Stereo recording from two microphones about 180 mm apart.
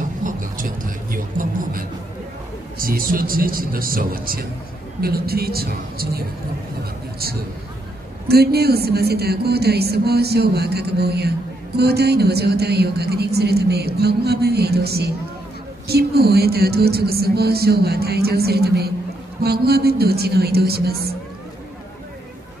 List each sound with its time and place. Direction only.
0.2 s vehicle: 50° right (ahead or behind)
2.8 s speech: 50° right (ahead or behind)
8.3 s speech: 60° right (ahead or behind)